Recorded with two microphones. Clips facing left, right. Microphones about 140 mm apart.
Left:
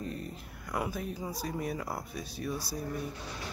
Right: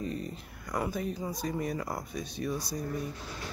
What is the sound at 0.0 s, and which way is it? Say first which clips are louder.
Speech: right 3 dB; centre (ahead or behind).